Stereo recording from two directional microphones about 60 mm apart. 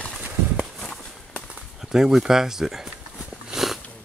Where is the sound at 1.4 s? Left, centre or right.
Centre.